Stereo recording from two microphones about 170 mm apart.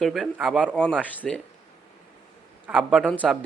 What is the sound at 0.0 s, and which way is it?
A man's voice, centre (ahead or behind).